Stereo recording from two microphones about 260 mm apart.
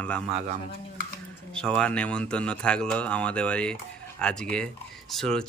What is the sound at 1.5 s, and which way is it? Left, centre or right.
Speech, centre.